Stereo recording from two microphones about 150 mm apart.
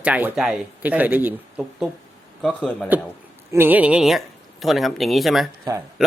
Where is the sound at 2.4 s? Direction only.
5° left (ahead or behind).